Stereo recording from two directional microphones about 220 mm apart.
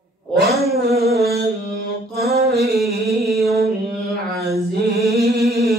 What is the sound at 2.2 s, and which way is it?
Mantra, 45° right (ahead or behind).